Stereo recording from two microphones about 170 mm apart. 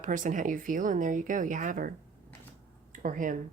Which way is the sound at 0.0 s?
50° right (ahead or behind).